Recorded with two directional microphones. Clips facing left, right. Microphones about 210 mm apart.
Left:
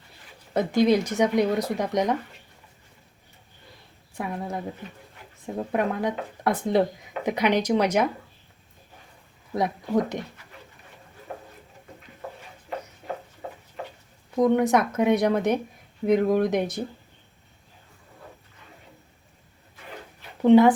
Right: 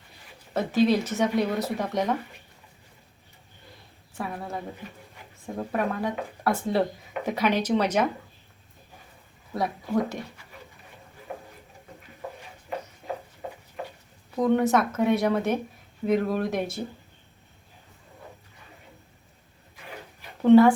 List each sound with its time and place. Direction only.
0.5 s speech: 15° left (ahead or behind)
4.2 s speech: 15° left (ahead or behind)
9.6 s speech: 20° left (ahead or behind)
14.3 s speech: 15° left (ahead or behind)
20.4 s speech: 15° left (ahead or behind)